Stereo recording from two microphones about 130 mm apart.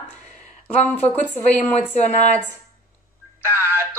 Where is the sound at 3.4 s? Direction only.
20° right (ahead or behind).